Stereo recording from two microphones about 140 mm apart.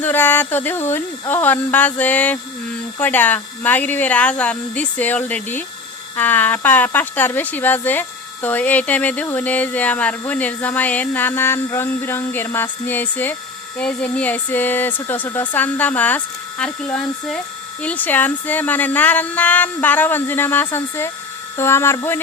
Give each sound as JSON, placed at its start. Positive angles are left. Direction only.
{"t": 0.0, "sound": "speech", "side_deg": 15}